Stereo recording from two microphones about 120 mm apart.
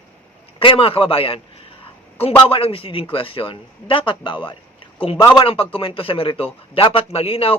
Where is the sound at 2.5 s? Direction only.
50° left (ahead or behind).